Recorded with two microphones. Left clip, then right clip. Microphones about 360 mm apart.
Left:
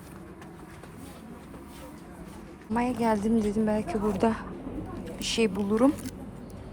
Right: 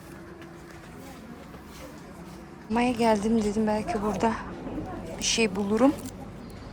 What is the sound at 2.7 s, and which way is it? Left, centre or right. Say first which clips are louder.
A woman's voice: right 3 dB; centre.